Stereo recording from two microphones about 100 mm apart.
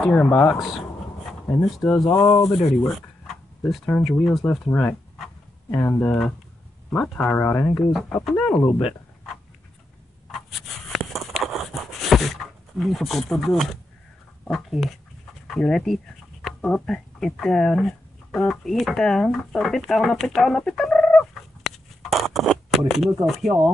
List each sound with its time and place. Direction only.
0.0 s speech: 5° left (ahead or behind)
1.5 s speech: centre (ahead or behind)
2.6 s a sound: centre (ahead or behind)
4.2 s speech: centre (ahead or behind)
4.6 s speech: 20° left (ahead or behind)
7.7 s speech: 5° left (ahead or behind)
8.6 s speech: 65° left (ahead or behind)
10.9 s a sound: centre (ahead or behind)
14.4 s speech: centre (ahead or behind)